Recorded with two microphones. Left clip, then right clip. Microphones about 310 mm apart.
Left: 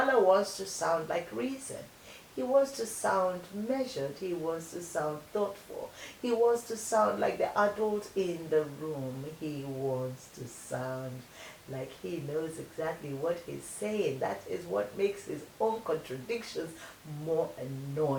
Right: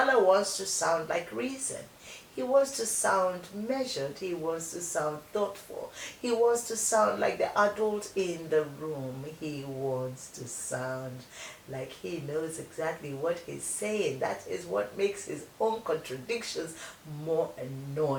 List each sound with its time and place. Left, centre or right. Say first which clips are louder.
0.0 s speech: right 2 dB; centre
12.3 s speech: right 2 dB; centre